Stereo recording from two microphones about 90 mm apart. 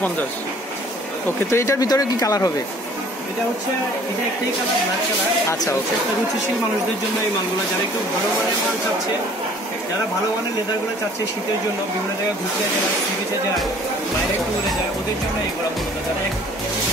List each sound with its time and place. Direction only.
1.5 s speech: 35° left (ahead or behind)